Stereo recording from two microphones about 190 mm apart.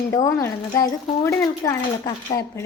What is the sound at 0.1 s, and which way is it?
Speech, 15° left (ahead or behind).